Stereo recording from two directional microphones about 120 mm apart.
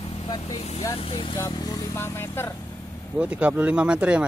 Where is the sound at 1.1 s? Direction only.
40° left (ahead or behind).